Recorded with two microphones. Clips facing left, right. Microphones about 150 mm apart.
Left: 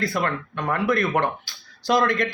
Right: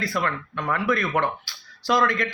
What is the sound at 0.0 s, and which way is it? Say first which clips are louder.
Speech: left 2 dB; 45° left (ahead or behind).